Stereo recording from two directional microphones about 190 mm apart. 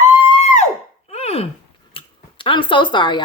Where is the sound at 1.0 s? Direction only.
35° left (ahead or behind).